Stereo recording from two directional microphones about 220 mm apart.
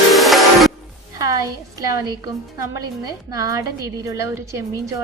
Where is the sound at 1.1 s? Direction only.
15° right (ahead or behind).